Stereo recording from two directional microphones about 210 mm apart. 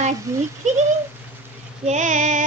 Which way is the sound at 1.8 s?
35° right (ahead or behind).